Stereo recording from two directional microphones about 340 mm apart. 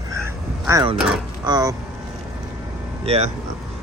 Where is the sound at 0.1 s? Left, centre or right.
Centre.